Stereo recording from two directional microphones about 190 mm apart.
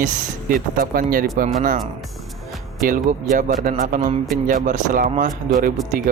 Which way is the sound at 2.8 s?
45° right (ahead or behind).